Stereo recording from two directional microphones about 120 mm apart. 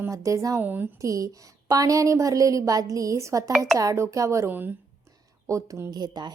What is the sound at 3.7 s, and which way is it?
A woman's voice, 25° right (ahead or behind).